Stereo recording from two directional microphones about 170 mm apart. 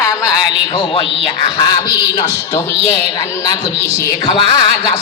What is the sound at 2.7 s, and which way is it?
Speech, 35° right (ahead or behind).